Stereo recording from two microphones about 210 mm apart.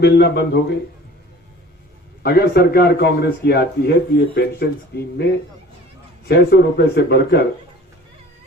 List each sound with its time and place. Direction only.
0.0 s a man's voice: 50° left (ahead or behind)
2.2 s a man's voice: 50° left (ahead or behind)
4.9 s a man's voice: 50° left (ahead or behind)